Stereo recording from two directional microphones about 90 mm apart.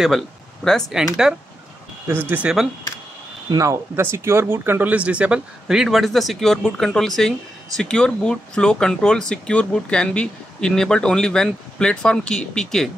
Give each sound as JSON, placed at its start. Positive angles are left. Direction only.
{"t": 0.9, "sound": "speech", "side_deg": -5}
{"t": 2.0, "sound": "speech", "side_deg": -25}
{"t": 2.4, "sound": "speech", "side_deg": -5}
{"t": 3.5, "sound": "speech", "side_deg": -35}